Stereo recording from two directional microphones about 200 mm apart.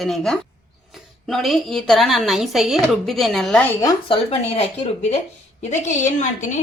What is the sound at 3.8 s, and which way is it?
A woman's voice, 20° left (ahead or behind).